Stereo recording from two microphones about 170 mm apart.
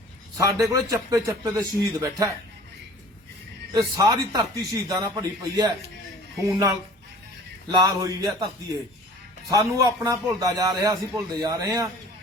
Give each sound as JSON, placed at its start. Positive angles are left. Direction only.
{"t": 0.3, "sound": "a man's voice", "side_deg": -20}
{"t": 3.7, "sound": "a man's voice", "side_deg": -20}